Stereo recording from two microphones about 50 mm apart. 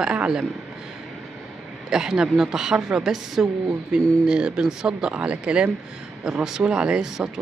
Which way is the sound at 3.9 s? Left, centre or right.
Centre.